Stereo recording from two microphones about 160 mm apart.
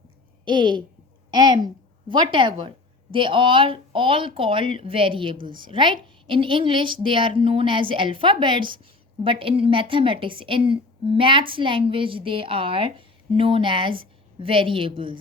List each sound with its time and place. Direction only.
0.4 s a woman's voice: 30° right (ahead or behind)